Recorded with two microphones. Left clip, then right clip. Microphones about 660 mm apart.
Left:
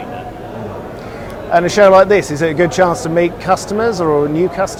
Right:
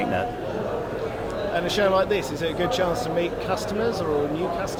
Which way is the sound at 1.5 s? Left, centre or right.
Left.